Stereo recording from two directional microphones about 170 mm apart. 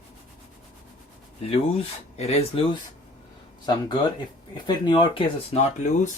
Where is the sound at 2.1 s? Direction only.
40° left (ahead or behind).